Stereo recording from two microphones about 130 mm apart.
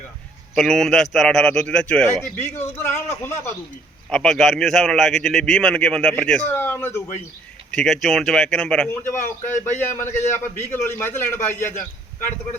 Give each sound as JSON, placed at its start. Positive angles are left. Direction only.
{"t": 0.5, "sound": "a man's voice", "side_deg": 0}
{"t": 4.1, "sound": "a man's voice", "side_deg": 5}
{"t": 7.7, "sound": "a man's voice", "side_deg": 5}
{"t": 8.9, "sound": "a man's voice", "side_deg": 15}